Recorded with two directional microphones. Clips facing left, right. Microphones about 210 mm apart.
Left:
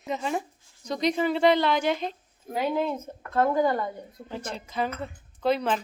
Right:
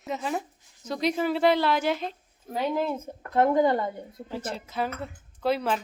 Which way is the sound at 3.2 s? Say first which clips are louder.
Right 2 dB; 20° right (ahead or behind).